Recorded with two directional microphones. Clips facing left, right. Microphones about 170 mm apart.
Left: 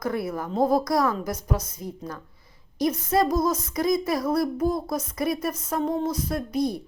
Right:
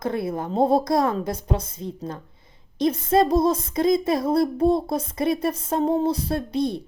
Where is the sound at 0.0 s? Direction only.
25° right (ahead or behind).